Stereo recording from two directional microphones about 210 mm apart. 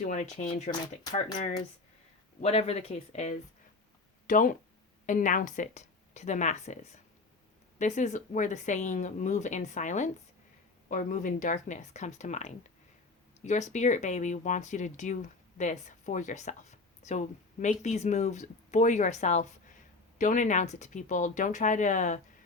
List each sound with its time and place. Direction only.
0.0 s speech: 35° left (ahead or behind)
7.8 s speech: 35° left (ahead or behind)